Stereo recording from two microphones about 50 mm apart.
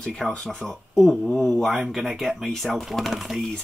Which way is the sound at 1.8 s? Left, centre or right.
Centre.